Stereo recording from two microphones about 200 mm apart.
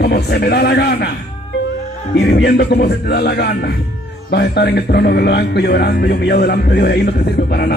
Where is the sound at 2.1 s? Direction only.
55° left (ahead or behind).